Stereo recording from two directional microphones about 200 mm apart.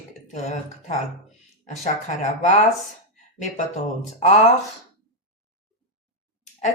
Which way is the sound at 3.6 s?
35° left (ahead or behind).